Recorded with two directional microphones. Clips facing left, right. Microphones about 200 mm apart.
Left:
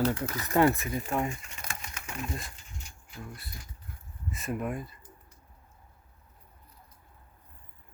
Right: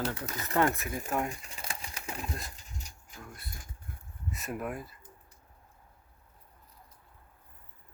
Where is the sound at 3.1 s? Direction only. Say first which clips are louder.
Left 4 dB; centre (ahead or behind).